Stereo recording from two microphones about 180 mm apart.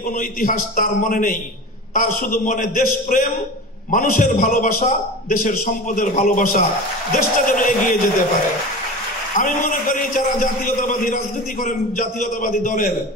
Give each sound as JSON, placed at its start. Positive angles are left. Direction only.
{"t": 0.1, "sound": "a man's voice", "side_deg": 50}
{"t": 9.4, "sound": "a man's voice", "side_deg": 50}